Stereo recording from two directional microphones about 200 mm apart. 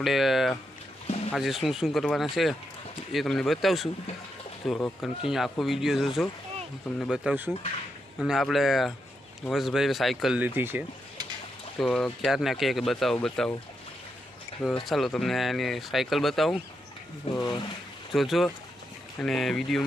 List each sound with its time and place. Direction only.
0.0 s speech: centre (ahead or behind)
1.0 s a sound: 30° left (ahead or behind)
1.3 s speech: centre (ahead or behind)
11.8 s speech: 5° left (ahead or behind)
14.8 s speech: centre (ahead or behind)
17.3 s speech: 30° left (ahead or behind)
18.1 s speech: centre (ahead or behind)